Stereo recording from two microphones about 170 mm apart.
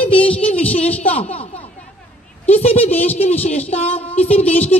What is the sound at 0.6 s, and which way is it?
Speech, 35° left (ahead or behind).